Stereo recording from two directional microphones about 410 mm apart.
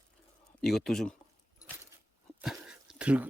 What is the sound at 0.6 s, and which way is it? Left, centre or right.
Speech, centre.